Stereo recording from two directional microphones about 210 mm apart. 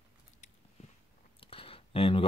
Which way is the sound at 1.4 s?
25° left (ahead or behind).